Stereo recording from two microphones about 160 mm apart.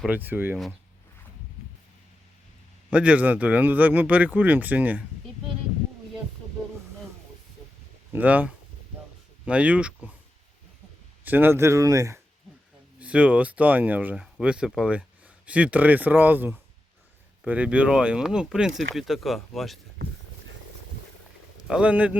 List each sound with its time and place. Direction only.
0.0 s speech: 10° right (ahead or behind)
2.9 s speech: 5° right (ahead or behind)
8.1 s speech: 10° right (ahead or behind)
11.2 s speech: 10° right (ahead or behind)
13.0 s speech: 10° right (ahead or behind)
21.7 s speech: 5° right (ahead or behind)